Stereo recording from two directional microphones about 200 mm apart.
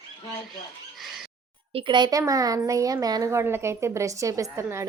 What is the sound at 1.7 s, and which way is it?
A woman's voice, 25° right (ahead or behind).